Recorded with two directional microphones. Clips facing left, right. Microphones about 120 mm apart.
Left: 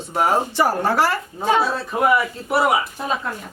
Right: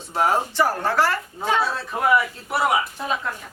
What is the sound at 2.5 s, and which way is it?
Speech, 5° left (ahead or behind).